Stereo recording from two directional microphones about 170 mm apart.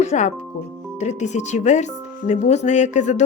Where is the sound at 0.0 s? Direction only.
45° left (ahead or behind).